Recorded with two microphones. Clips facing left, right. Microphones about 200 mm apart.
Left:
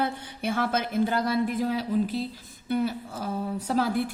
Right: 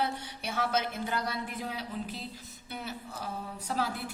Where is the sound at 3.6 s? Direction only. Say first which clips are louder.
Left 6 dB; 45° left (ahead or behind).